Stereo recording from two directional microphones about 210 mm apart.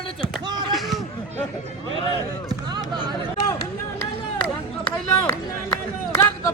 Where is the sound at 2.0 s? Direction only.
20° right (ahead or behind).